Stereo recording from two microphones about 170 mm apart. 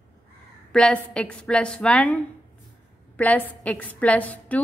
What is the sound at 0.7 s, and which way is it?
A woman's voice, 5° left (ahead or behind).